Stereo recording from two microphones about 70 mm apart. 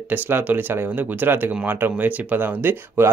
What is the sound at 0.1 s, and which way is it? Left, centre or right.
Speech, right.